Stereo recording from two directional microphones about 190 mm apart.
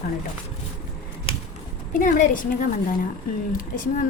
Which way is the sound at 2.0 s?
45° left (ahead or behind).